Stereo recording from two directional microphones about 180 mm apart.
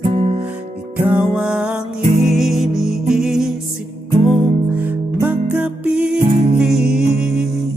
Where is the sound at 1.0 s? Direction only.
5° right (ahead or behind).